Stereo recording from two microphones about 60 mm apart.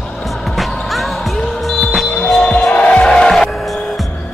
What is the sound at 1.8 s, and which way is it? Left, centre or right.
Smoke detector, centre.